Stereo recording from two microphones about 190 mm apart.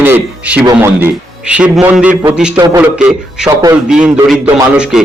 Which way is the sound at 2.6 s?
20° right (ahead or behind).